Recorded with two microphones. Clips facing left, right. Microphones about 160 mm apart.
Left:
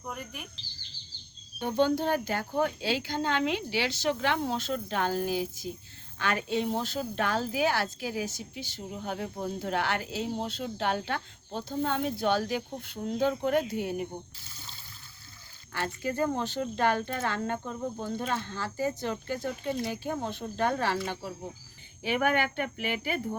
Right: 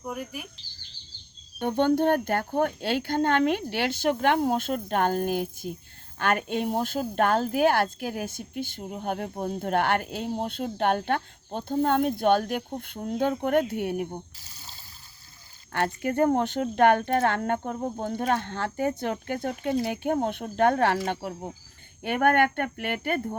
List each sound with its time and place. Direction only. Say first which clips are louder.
0.0 s speech: right 5 dB; 5° right (ahead or behind)
1.5 s speech: right 3 dB; 60° right (ahead or behind)
15.7 s speech: right 6 dB; 60° right (ahead or behind)